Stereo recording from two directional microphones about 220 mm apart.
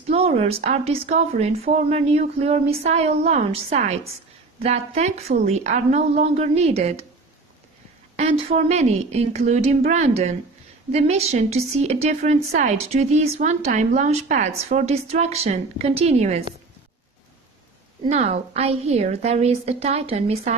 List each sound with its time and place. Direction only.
0.1 s a woman's voice: 30° right (ahead or behind)
8.2 s a woman's voice: 25° right (ahead or behind)
18.0 s a woman's voice: 30° right (ahead or behind)